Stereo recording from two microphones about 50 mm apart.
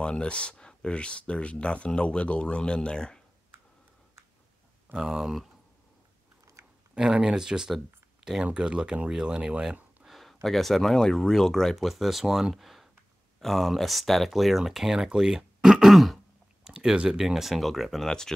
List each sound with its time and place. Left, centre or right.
0.0 s speech: centre
4.9 s speech: centre
6.6 s chewing: right
7.0 s speech: centre
10.1 s speech: centre
11.7 s speech: centre
16.6 s speech: centre
17.3 s speech: centre
18.0 s speech: centre